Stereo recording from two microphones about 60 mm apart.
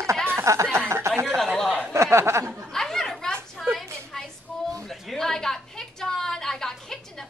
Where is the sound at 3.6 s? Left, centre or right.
Centre.